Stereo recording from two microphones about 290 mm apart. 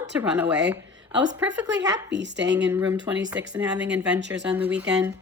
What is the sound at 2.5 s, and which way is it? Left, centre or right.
Speech, centre.